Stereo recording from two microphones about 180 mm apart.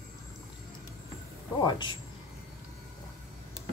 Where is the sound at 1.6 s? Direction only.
25° left (ahead or behind).